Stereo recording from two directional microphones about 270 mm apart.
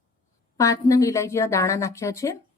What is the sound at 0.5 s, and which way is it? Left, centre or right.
Speech, centre.